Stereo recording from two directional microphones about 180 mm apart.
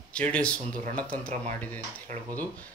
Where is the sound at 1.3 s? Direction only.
40° right (ahead or behind).